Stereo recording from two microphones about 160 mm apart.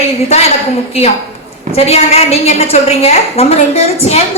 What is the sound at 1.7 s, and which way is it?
A woman's voice, 40° left (ahead or behind).